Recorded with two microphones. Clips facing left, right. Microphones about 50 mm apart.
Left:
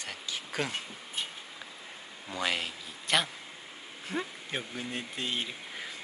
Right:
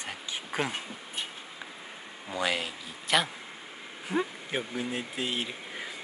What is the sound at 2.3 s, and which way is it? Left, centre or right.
Speech, centre.